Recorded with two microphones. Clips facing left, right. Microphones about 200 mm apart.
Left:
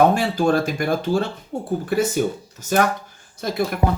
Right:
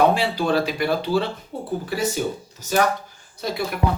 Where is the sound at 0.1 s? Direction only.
45° left (ahead or behind).